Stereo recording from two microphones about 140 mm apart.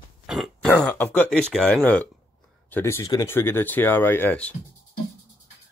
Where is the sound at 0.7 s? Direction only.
10° left (ahead or behind).